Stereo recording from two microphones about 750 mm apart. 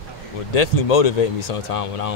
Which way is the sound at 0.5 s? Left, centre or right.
Left.